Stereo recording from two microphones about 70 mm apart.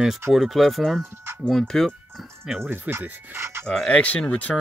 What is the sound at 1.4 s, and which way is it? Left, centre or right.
Speech, centre.